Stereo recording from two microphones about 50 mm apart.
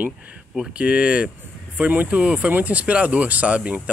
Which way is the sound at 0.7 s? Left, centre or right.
Right.